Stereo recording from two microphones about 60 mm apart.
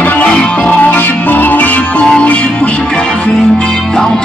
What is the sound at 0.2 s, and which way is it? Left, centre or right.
Music, centre.